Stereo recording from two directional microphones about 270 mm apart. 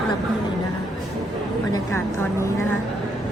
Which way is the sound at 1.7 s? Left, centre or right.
Centre.